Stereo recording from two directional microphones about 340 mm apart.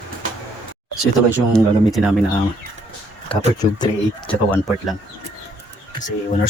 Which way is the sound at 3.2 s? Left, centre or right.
Centre.